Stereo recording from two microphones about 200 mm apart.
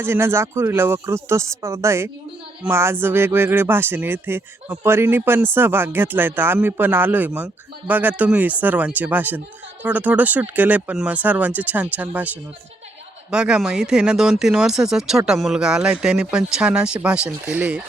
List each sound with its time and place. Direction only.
0.0 s speech: 10° right (ahead or behind)